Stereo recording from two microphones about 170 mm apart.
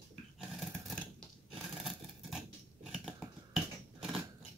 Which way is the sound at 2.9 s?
Centre (ahead or behind).